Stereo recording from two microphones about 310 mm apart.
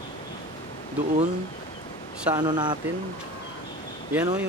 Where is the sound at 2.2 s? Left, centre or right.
Centre.